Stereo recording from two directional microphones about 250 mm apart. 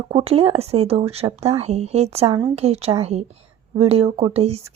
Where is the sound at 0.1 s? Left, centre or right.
Right.